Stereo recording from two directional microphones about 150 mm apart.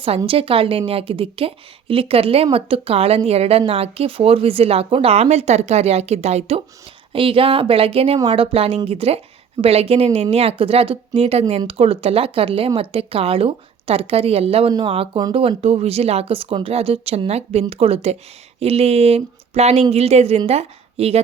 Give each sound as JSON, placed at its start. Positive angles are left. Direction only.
{"t": 0.3, "sound": "a woman's voice", "side_deg": -40}